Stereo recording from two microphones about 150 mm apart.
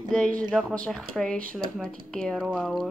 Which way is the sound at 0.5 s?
5° left (ahead or behind).